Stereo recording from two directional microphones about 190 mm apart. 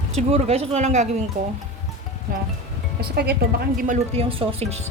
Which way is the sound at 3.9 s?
30° right (ahead or behind).